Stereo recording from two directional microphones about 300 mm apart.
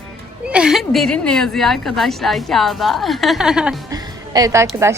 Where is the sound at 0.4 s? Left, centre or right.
Centre.